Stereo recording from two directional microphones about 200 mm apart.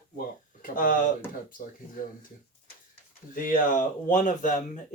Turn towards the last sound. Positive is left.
turn(degrees=40)  # may be behind; listen again after turning